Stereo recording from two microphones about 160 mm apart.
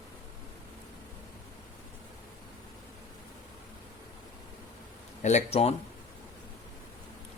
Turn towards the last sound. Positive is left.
turn(degrees=40)  # may be behind; listen again after turning